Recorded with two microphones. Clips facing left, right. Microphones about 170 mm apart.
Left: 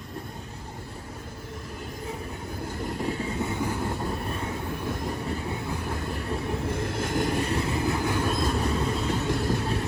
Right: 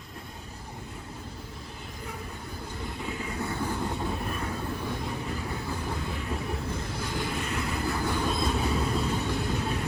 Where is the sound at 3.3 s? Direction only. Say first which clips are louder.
Left 3 dB; 20° left (ahead or behind).